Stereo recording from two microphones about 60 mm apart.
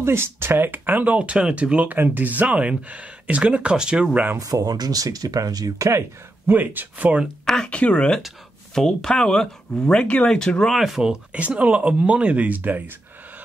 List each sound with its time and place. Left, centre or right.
0.0 s speech: right; by 4.2 s centre
4.4 s speech: right
6.4 s speech: right
7.4 s speech: centre
10.6 s speech: centre
11.3 s speech: right